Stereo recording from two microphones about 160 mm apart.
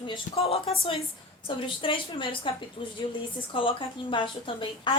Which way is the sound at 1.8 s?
35° left (ahead or behind).